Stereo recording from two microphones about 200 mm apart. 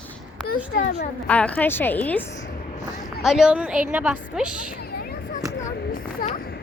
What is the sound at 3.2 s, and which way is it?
A woman's voice, centre (ahead or behind).